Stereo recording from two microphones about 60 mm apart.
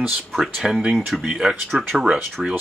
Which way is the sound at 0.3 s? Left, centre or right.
Centre.